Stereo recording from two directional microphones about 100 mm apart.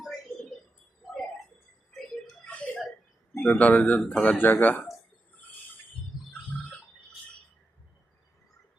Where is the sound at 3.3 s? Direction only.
10° left (ahead or behind).